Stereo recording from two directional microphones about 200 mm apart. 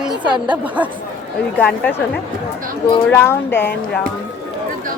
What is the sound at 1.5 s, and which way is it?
Speech, 5° left (ahead or behind).